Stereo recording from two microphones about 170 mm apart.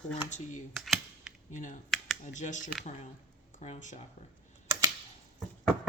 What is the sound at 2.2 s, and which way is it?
Speech, 45° left (ahead or behind).